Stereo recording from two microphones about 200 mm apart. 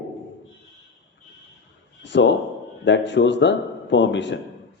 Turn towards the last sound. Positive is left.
turn(degrees=65)  # may be behind; listen again after turning